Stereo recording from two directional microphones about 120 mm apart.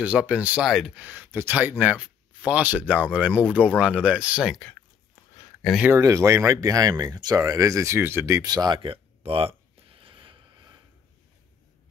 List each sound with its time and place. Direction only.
0.0 s speech: 10° right (ahead or behind)
5.9 s speech: 25° right (ahead or behind)
8.5 s a sound: 35° right (ahead or behind)